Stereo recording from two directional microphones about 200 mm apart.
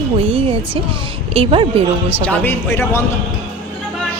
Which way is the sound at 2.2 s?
10° left (ahead or behind).